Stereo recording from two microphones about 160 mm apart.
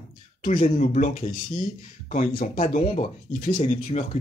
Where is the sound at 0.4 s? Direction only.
55° left (ahead or behind).